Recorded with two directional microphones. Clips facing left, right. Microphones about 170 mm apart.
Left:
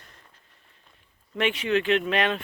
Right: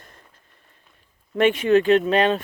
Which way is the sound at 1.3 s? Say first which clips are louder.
Right 8 dB; 45° right (ahead or behind).